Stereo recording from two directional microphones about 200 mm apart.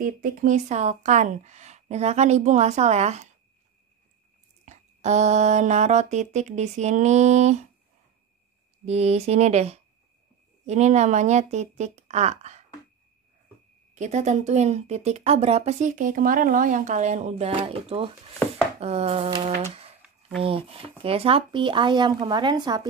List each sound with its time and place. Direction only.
0.0 s speech: 40° right (ahead or behind)
4.6 s speech: 35° right (ahead or behind)
8.8 s speech: 30° right (ahead or behind)
13.9 s speech: 35° right (ahead or behind)